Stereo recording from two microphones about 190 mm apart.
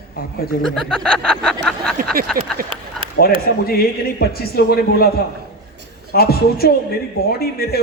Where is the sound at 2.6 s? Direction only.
50° right (ahead or behind).